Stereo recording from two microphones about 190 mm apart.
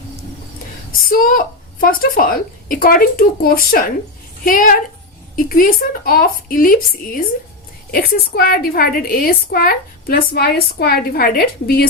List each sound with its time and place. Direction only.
1.0 s a woman's voice: 50° left (ahead or behind)